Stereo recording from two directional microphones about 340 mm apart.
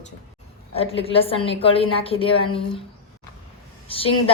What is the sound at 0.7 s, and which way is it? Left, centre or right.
A woman's voice, centre.